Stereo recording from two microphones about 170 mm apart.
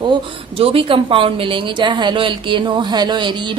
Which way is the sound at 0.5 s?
35° right (ahead or behind).